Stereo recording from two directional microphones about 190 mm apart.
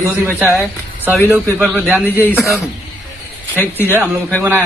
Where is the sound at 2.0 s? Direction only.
10° left (ahead or behind).